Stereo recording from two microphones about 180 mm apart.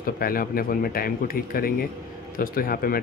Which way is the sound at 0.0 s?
55° left (ahead or behind).